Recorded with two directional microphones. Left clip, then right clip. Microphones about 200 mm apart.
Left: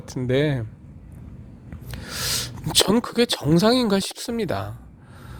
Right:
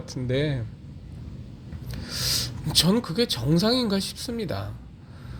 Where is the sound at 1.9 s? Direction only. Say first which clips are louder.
Even; 45° left (ahead or behind).